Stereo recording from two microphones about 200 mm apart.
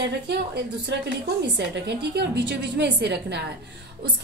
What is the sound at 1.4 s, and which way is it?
A woman's voice, 60° right (ahead or behind).